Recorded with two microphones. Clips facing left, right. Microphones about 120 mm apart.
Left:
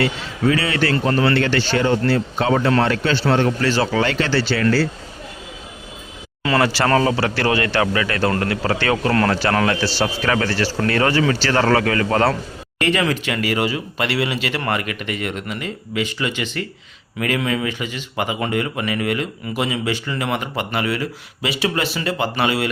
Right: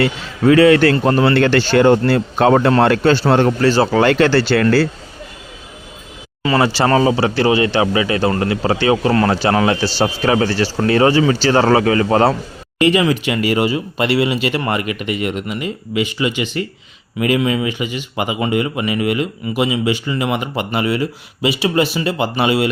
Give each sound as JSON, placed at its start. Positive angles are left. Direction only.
{"t": 0.4, "sound": "speech", "side_deg": -45}
{"t": 1.1, "sound": "speech", "side_deg": -30}
{"t": 1.4, "sound": "speech", "side_deg": -45}
{"t": 6.4, "sound": "speech", "side_deg": -10}
{"t": 10.0, "sound": "speech", "side_deg": -25}